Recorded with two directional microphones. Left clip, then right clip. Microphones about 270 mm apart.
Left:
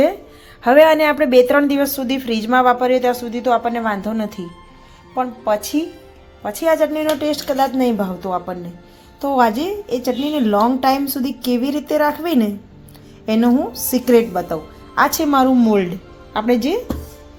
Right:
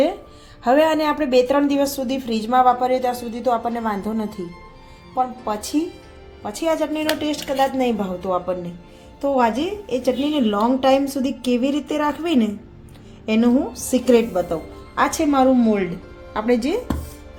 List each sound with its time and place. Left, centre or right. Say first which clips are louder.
0.6 s a woman's voice: left 6 dB; centre